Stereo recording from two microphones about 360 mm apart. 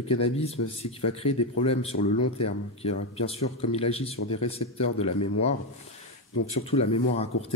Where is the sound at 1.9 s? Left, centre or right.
Left.